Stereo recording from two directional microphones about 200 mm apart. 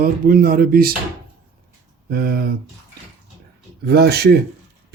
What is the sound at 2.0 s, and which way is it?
Speech, 50° right (ahead or behind).